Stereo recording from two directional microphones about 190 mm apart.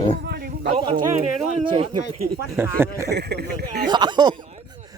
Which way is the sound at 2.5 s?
10° right (ahead or behind).